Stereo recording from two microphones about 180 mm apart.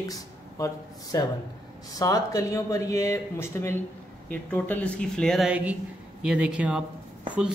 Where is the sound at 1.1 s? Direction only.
20° left (ahead or behind).